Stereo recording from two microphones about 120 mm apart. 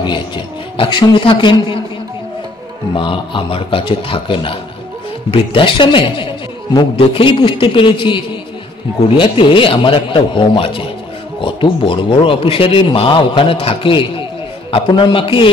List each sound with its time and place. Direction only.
0.7 s a man's voice: 45° left (ahead or behind)
3.0 s a man's voice: 45° left (ahead or behind)